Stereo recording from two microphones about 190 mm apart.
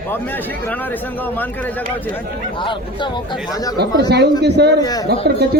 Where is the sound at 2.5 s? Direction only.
25° left (ahead or behind).